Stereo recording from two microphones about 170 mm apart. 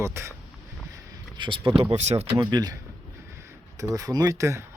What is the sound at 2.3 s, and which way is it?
Speech, 20° right (ahead or behind).